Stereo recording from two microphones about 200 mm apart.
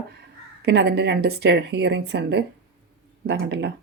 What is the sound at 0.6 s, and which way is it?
Speech, 55° right (ahead or behind).